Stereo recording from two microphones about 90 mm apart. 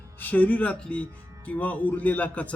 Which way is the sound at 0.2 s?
20° left (ahead or behind).